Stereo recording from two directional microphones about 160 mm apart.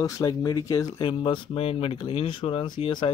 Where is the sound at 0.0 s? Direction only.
25° left (ahead or behind).